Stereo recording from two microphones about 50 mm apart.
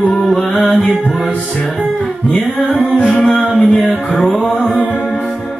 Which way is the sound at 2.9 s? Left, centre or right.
Centre.